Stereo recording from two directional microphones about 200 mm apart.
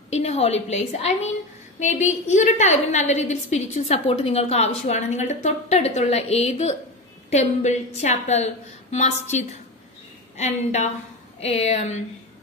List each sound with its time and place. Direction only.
0.1 s a woman's voice: 30° left (ahead or behind)